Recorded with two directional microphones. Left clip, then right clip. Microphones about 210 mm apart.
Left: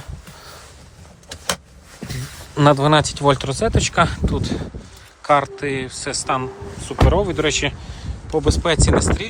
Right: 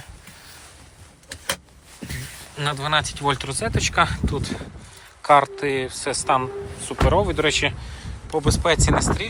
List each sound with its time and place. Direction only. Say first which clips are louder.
2.6 s speech: left 8 dB; 30° left (ahead or behind)